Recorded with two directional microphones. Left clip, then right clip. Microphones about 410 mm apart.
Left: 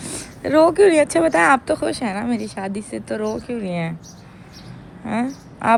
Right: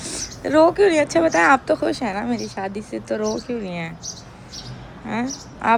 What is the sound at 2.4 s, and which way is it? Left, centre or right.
Speech, left.